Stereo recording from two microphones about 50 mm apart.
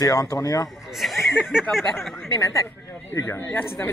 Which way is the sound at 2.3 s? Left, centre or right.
Left.